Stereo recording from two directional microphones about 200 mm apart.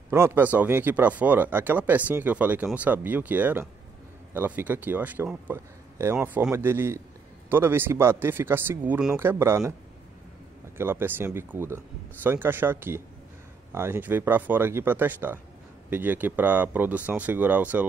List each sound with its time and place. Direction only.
0.1 s speech: 10° right (ahead or behind)
10.8 s speech: 10° right (ahead or behind)